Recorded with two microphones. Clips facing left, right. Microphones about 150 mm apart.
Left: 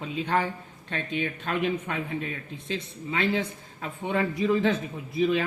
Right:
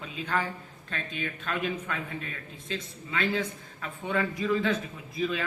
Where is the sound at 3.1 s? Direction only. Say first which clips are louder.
Left 2 dB; 30° left (ahead or behind).